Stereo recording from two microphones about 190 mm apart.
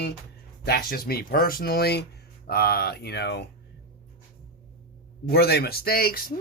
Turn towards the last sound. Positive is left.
turn(degrees=50)  # may be behind; listen again after turning